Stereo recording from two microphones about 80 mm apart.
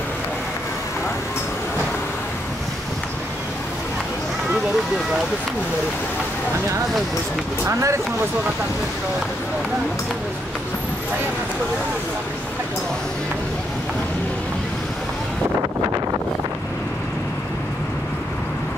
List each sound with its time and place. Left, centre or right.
7.6 s speech: right